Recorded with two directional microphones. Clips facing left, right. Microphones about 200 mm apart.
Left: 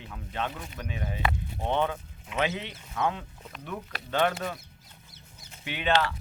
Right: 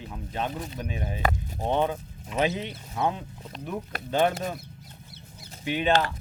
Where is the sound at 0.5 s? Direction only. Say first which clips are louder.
Right 6 dB; 35° right (ahead or behind).